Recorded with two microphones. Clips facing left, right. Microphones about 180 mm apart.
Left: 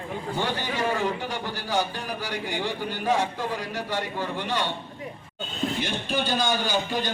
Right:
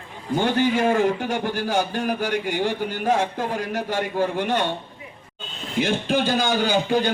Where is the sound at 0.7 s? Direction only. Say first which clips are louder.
Right 7 dB; 45° right (ahead or behind).